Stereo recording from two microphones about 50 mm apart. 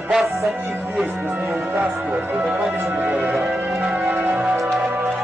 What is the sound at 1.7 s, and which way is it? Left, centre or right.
Music, right.